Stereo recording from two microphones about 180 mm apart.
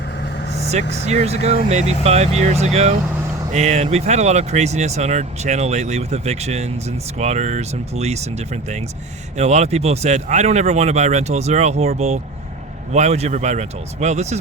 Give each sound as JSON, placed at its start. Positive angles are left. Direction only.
{"t": 0.7, "sound": "speech", "side_deg": -40}
{"t": 9.4, "sound": "speech", "side_deg": -40}